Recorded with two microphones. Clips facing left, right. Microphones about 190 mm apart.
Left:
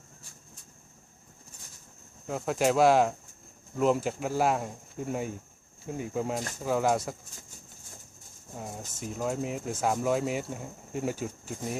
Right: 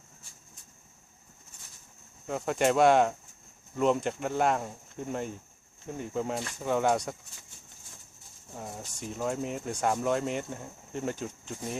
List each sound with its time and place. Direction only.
2.2 s speech: centre (ahead or behind)
8.5 s speech: centre (ahead or behind)